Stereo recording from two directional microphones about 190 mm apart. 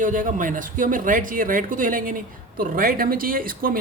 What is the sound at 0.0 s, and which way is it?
Speech, 45° right (ahead or behind).